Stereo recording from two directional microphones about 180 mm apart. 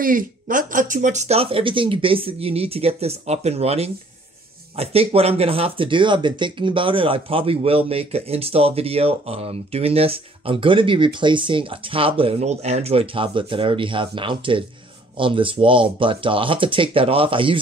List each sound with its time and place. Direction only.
0.0 s speech: 50° right (ahead or behind); by 17.6 s 30° right (ahead or behind)